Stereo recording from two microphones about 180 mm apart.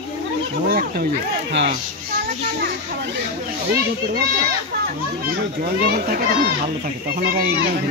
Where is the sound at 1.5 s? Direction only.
75° right (ahead or behind).